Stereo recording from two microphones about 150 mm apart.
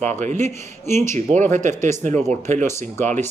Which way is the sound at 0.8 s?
15° left (ahead or behind).